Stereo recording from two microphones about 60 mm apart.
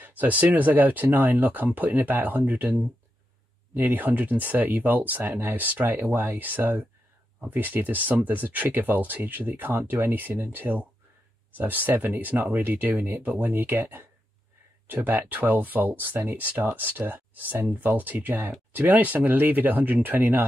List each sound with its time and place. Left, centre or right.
0.0 s speech: right
3.7 s speech: right